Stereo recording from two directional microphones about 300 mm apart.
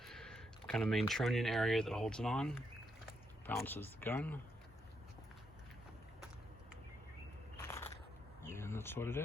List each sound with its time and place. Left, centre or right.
0.0 s speech: centre
7.6 s biting: centre
8.4 s a sound: centre